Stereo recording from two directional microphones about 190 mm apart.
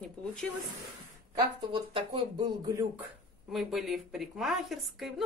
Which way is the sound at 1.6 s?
25° right (ahead or behind).